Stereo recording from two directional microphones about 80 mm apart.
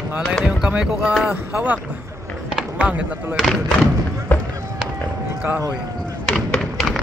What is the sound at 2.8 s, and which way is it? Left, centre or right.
Speech, centre.